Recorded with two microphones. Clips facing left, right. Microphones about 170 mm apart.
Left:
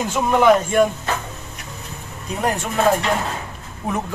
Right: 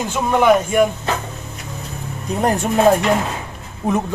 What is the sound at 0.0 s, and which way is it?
Speech, centre (ahead or behind).